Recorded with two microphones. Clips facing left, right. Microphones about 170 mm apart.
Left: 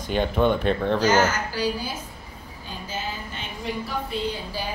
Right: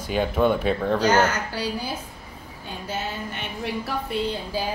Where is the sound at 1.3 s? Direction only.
65° right (ahead or behind).